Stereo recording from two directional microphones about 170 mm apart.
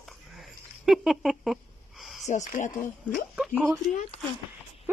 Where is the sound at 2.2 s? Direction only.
45° left (ahead or behind).